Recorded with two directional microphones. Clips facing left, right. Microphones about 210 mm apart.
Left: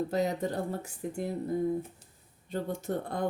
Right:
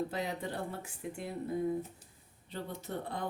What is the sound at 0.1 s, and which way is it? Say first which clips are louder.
Speech: left 7 dB; 45° left (ahead or behind).